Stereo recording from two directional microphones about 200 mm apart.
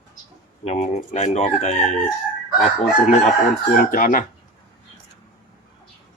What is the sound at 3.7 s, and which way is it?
Speech, 45° left (ahead or behind).